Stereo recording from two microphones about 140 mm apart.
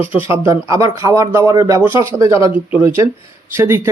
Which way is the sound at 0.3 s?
20° right (ahead or behind).